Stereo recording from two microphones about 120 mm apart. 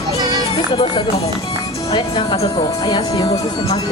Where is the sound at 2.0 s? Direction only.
55° left (ahead or behind).